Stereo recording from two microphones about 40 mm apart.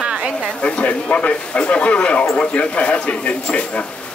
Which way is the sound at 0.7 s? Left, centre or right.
Left.